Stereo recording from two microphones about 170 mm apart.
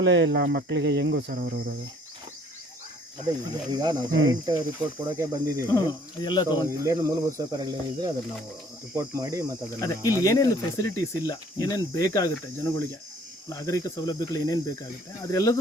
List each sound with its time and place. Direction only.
0.0 s cricket: 90° right; by 1.7 s 65° right (ahead or behind)
3.2 s speech: 25° right (ahead or behind)
5.6 s speech: 15° left (ahead or behind)
6.7 s speech: 20° right (ahead or behind)
9.8 s speech: 20° left (ahead or behind)